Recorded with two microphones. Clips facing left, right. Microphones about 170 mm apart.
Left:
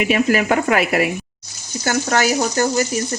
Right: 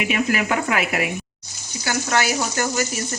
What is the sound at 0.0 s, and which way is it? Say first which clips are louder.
Speech: left 5 dB; 35° left (ahead or behind).